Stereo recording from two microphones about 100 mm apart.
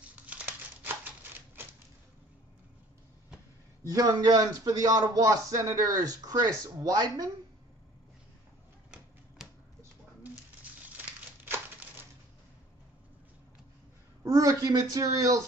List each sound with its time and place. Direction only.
0.1 s a sound: 15° right (ahead or behind)
3.8 s speech: 40° right (ahead or behind)
14.2 s a woman's voice: 35° right (ahead or behind)